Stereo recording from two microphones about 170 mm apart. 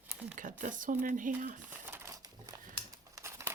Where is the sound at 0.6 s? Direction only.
50° right (ahead or behind).